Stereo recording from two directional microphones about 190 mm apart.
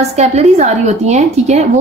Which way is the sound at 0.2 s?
35° right (ahead or behind).